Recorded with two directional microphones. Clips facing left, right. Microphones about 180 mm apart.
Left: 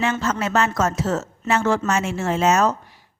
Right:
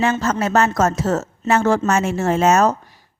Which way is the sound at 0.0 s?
40° right (ahead or behind).